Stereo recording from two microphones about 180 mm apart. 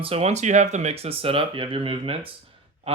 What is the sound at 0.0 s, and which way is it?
Speech, 35° right (ahead or behind).